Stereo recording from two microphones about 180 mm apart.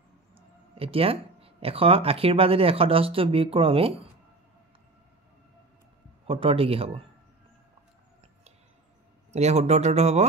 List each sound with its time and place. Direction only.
0.3 s speech: 30° right (ahead or behind)
6.2 s speech: 30° right (ahead or behind)
9.3 s speech: 40° right (ahead or behind)